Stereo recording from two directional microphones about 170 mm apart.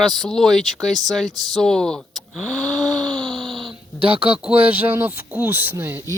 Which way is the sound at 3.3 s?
Centre (ahead or behind).